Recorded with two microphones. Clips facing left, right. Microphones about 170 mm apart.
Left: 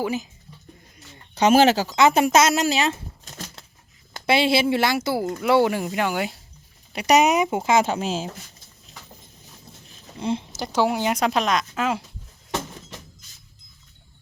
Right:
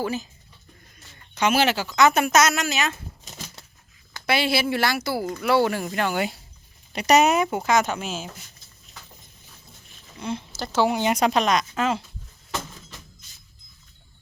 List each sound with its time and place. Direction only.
0.0 s speech: 15° left (ahead or behind)
1.4 s speech: 40° left (ahead or behind)
2.0 s speech: 30° left (ahead or behind)
4.1 s speech: 25° left (ahead or behind)
7.5 s speech: 25° left (ahead or behind)
9.9 s speech: 30° left (ahead or behind); by 12.0 s 10° left (ahead or behind)